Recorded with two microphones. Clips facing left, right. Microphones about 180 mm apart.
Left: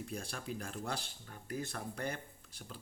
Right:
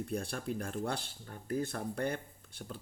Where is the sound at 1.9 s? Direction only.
55° right (ahead or behind).